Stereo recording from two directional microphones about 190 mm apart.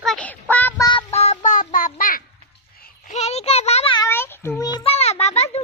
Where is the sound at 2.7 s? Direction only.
45° left (ahead or behind); by 4.1 s 25° left (ahead or behind).